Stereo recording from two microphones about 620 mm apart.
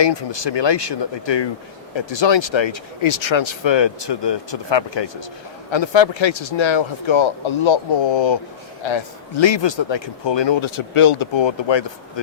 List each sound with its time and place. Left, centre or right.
0.0 s speech: left